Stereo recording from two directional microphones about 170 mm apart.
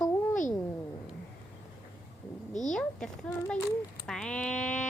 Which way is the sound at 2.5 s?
45° left (ahead or behind).